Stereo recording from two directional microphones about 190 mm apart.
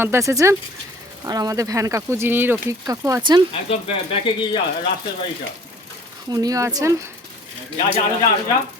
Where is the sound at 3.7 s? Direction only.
25° left (ahead or behind).